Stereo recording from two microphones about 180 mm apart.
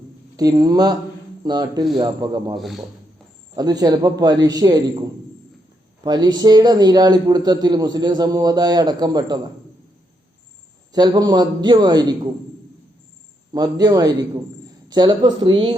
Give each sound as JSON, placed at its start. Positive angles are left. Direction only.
{"t": 0.3, "sound": "a man's voice", "side_deg": -20}
{"t": 2.6, "sound": "a man's voice", "side_deg": 0}
{"t": 3.5, "sound": "a man's voice", "side_deg": -20}
{"t": 10.9, "sound": "a man's voice", "side_deg": -20}
{"t": 13.5, "sound": "a man's voice", "side_deg": -20}